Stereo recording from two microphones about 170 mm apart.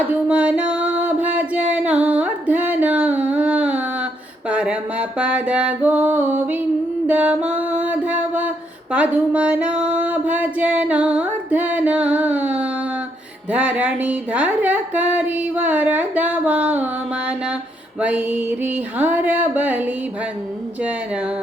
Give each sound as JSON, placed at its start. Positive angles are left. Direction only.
{"t": 0.0, "sound": "music", "side_deg": -10}
{"t": 13.5, "sound": "speech", "side_deg": -10}